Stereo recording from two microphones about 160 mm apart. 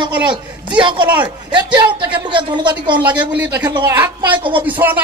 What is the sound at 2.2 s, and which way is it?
Speech, 30° right (ahead or behind).